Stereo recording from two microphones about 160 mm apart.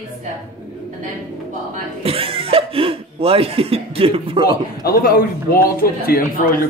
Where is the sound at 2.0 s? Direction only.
35° right (ahead or behind).